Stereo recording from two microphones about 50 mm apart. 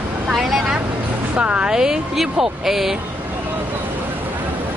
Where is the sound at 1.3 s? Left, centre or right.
Right.